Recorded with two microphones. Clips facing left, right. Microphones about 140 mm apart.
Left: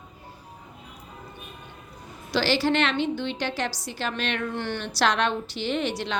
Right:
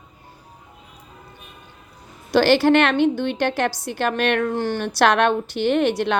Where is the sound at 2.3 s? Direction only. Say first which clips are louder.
Right 8 dB; 55° right (ahead or behind).